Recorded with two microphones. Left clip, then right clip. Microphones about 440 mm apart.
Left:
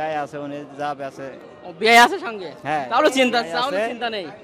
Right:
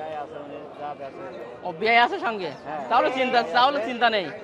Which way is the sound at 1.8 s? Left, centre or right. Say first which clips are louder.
Left 6 dB; left.